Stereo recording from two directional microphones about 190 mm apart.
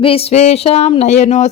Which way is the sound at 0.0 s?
30° left (ahead or behind).